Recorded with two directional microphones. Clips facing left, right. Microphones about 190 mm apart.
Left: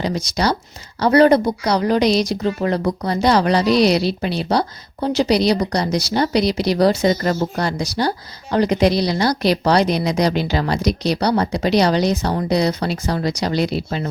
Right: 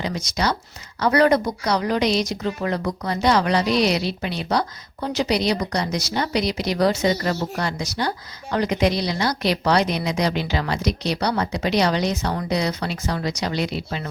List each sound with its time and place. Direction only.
0.0 s a woman's voice: 35° left (ahead or behind)